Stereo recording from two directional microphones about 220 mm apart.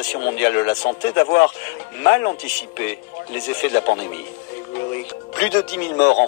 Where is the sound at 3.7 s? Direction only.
50° left (ahead or behind).